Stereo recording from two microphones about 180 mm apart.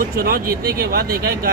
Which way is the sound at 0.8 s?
60° right (ahead or behind).